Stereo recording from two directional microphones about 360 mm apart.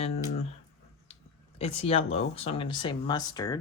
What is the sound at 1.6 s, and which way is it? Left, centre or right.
Speech, centre.